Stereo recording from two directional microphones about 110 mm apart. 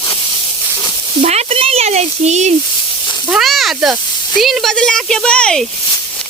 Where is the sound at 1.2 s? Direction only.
85° right.